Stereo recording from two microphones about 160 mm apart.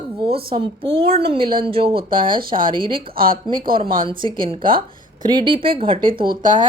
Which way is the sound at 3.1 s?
65° right (ahead or behind).